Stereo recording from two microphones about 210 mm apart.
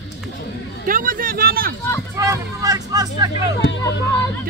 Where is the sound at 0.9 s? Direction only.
40° right (ahead or behind).